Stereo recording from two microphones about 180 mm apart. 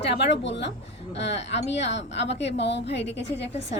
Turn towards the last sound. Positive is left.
turn(degrees=75)  # may be behind; listen again after turning